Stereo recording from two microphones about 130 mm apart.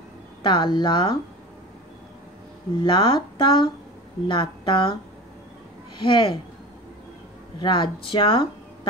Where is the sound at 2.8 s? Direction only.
40° left (ahead or behind).